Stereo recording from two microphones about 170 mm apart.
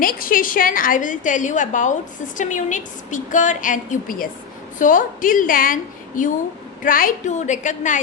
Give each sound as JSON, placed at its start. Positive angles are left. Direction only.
{"t": 0.0, "sound": "a woman's voice", "side_deg": 55}